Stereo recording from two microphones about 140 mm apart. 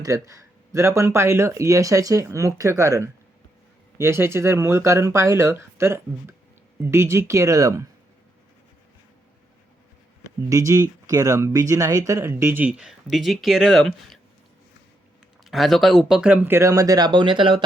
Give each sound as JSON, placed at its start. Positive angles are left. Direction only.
{"t": 0.0, "sound": "speech", "side_deg": -25}
{"t": 10.5, "sound": "speech", "side_deg": -20}
{"t": 15.4, "sound": "speech", "side_deg": 0}